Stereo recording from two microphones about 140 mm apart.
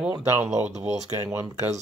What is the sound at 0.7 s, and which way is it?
Speech, 55° right (ahead or behind).